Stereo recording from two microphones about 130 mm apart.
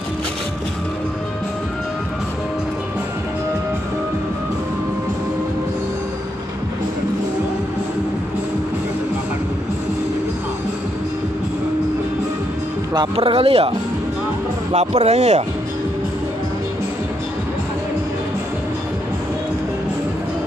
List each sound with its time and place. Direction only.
12.9 s speech: 40° right (ahead or behind); by 15.4 s 60° right (ahead or behind)